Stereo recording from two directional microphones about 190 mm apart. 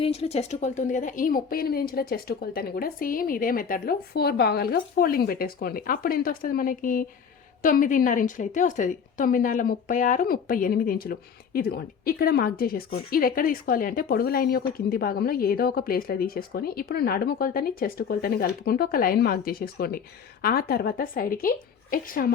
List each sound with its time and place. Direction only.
0.0 s a woman's voice: 30° left (ahead or behind); by 22.3 s 50° left (ahead or behind)